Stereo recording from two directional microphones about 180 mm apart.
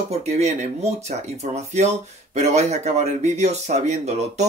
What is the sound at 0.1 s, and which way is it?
Speech, 40° right (ahead or behind).